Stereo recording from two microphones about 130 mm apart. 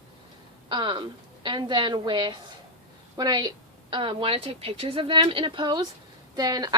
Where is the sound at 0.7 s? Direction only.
35° right (ahead or behind).